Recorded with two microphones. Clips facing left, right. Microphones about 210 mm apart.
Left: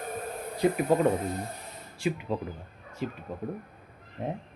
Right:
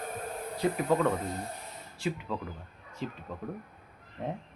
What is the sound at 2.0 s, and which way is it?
Speech, 15° left (ahead or behind).